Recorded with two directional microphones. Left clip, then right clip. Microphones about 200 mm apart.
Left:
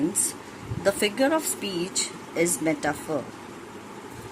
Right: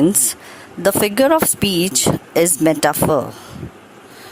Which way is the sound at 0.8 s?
50° right (ahead or behind).